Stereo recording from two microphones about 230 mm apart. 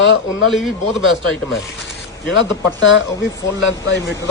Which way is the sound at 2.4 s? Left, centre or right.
Left.